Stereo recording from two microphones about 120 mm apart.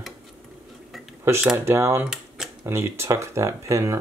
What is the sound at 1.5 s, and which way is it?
Speech, 20° right (ahead or behind).